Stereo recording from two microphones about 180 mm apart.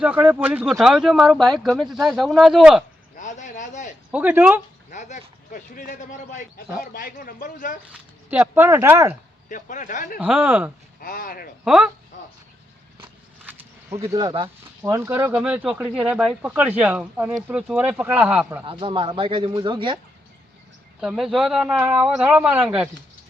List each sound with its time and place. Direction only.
0.0 s speech: 10° right (ahead or behind)
3.2 s a sound: 45° left (ahead or behind)
4.1 s speech: 10° right (ahead or behind)
4.9 s speech: 45° left (ahead or behind)
7.9 s speech: 10° right (ahead or behind)
9.5 s speech: 45° left (ahead or behind)
10.2 s speech: 10° right (ahead or behind)
11.0 s speech: 50° left (ahead or behind)
11.6 s speech: 5° right (ahead or behind)
13.0 s a sound: 10° right (ahead or behind)
14.8 s speech: 15° right (ahead or behind)
18.6 s speech: 30° right (ahead or behind)
21.0 s speech: 5° right (ahead or behind)